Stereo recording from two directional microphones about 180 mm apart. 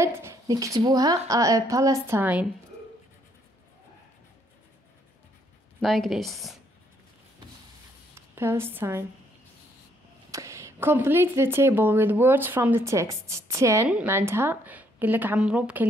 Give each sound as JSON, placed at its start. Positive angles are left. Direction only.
{"t": 0.0, "sound": "a woman's voice", "side_deg": -15}
{"t": 5.8, "sound": "a woman's voice", "side_deg": 0}
{"t": 8.1, "sound": "speech", "side_deg": -15}
{"t": 10.3, "sound": "a woman's voice", "side_deg": -15}